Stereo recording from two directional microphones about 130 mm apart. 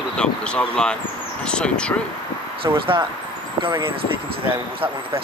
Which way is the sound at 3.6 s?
40° right (ahead or behind).